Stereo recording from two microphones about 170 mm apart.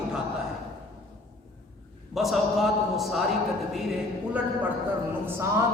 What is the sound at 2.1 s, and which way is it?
A man's voice, centre (ahead or behind).